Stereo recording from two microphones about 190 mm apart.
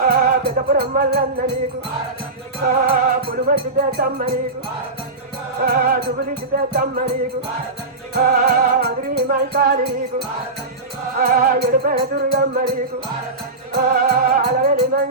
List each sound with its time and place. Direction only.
0.0 s music: 50° right (ahead or behind)
2.6 s music: 55° right (ahead or behind)
5.5 s music: 55° right (ahead or behind)
8.1 s music: 55° right (ahead or behind)
11.2 s music: 50° right (ahead or behind)
13.7 s music: 50° right (ahead or behind)